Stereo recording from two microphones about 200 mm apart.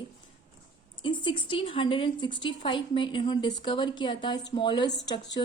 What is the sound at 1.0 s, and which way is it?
A woman's voice, 25° left (ahead or behind).